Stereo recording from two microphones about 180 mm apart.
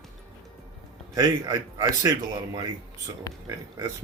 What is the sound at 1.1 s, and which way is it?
A man's voice, 20° right (ahead or behind).